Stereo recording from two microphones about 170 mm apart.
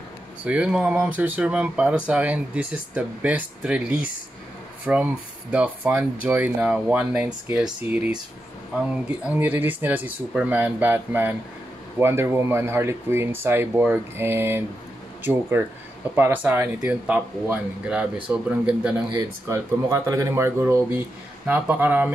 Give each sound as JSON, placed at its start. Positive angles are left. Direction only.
{"t": 0.5, "sound": "speech", "side_deg": -5}
{"t": 9.2, "sound": "speech", "side_deg": -10}
{"t": 19.1, "sound": "speech", "side_deg": -15}